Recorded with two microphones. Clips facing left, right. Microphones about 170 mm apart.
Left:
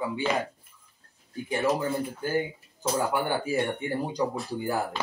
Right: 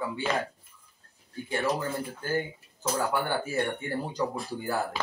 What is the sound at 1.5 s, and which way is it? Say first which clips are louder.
Speech: left 3 dB; 15° left (ahead or behind).